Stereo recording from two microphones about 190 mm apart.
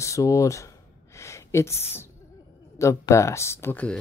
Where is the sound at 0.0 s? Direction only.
15° left (ahead or behind).